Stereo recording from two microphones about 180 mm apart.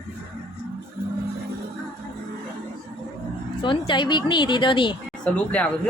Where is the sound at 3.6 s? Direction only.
25° left (ahead or behind).